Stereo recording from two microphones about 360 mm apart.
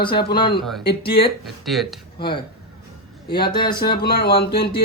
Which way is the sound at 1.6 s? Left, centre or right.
Centre.